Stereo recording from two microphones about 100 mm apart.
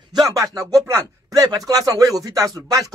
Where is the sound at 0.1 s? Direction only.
40° right (ahead or behind).